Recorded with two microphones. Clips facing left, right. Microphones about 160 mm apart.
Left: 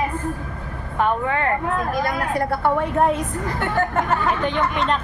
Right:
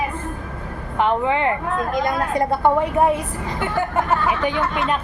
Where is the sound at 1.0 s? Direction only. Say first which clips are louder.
Right 2 dB; 20° right (ahead or behind).